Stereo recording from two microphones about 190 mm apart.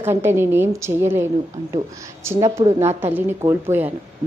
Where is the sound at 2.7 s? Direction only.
35° right (ahead or behind).